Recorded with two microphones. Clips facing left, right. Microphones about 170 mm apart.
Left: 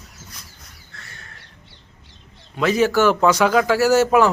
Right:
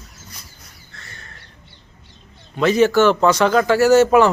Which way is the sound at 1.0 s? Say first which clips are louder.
Right 1 dB; 5° left (ahead or behind).